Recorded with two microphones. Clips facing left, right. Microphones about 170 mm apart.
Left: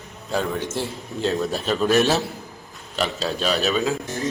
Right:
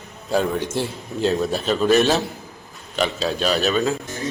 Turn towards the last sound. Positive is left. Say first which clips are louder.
# right 1 dB
turn(degrees=0)  # may be behind; listen again after turning